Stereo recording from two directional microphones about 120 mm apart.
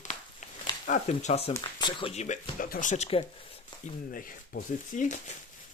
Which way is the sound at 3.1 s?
55° left (ahead or behind).